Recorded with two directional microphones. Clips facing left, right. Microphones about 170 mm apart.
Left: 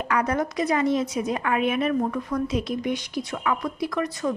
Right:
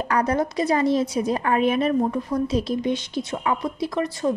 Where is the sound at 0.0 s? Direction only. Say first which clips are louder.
Right 2 dB; 35° right (ahead or behind).